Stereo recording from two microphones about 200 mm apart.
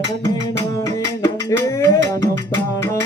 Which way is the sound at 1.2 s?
15° left (ahead or behind).